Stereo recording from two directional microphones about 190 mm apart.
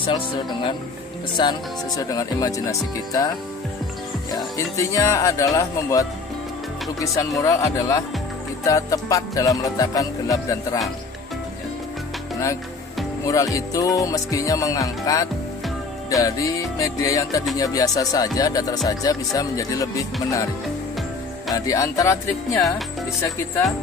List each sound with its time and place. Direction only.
1.3 s speech: 25° left (ahead or behind)
4.3 s music: 15° left (ahead or behind)
13.3 s music: 15° left (ahead or behind)
17.6 s speech: 20° left (ahead or behind)
18.9 s music: 20° left (ahead or behind)
21.5 s music: 15° left (ahead or behind)